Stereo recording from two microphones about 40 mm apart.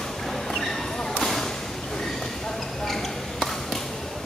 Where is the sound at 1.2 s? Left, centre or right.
Centre.